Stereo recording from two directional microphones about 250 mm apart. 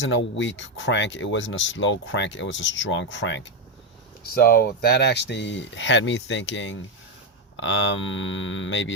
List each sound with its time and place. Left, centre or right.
0.0 s speech: left